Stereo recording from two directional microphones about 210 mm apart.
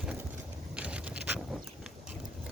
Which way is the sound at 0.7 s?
5° right (ahead or behind).